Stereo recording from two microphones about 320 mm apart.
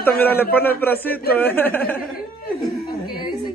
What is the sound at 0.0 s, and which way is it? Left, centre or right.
A man's voice, centre.